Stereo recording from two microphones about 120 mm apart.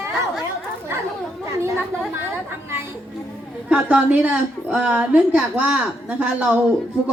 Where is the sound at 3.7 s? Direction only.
10° right (ahead or behind).